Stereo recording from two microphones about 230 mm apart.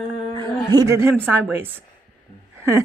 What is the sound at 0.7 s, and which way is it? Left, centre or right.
Speech, centre.